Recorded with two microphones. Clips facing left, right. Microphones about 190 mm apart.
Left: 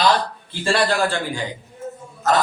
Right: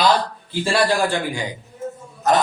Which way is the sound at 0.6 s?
10° right (ahead or behind).